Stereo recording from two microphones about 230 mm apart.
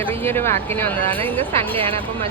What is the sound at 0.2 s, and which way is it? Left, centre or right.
Speech, centre.